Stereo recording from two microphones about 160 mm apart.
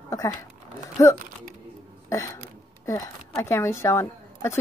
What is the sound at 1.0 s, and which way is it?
Speech, 20° left (ahead or behind).